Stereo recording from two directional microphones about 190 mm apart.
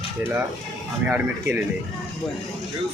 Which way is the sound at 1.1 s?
10° right (ahead or behind).